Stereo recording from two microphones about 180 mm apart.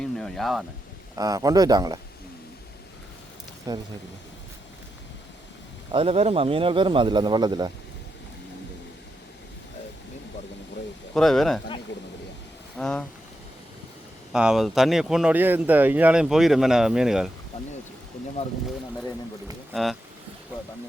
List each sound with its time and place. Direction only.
0.0 s a sound: 5° left (ahead or behind)
1.1 s speech: 20° right (ahead or behind)
3.7 s speech: 20° right (ahead or behind)
5.9 s speech: 30° right (ahead or behind)
11.1 s speech: centre (ahead or behind)
12.7 s speech: 5° left (ahead or behind)
14.3 s speech: 5° right (ahead or behind)
19.7 s speech: centre (ahead or behind)